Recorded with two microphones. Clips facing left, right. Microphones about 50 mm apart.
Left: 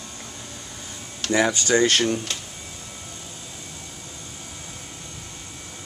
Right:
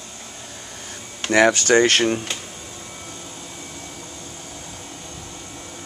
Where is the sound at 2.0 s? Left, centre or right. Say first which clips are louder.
Right 3 dB; right.